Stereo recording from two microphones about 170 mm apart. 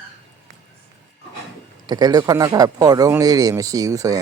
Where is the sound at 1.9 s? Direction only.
25° right (ahead or behind).